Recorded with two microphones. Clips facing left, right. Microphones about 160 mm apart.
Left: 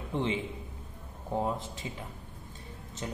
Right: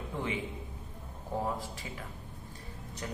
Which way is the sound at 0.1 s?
25° left (ahead or behind).